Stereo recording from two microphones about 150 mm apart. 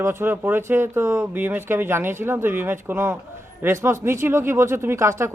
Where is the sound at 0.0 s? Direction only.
15° right (ahead or behind).